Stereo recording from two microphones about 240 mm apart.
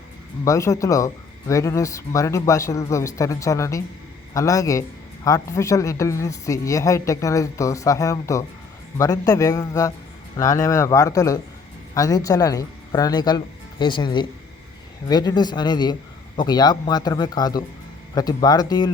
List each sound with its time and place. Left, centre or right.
0.4 s speech: centre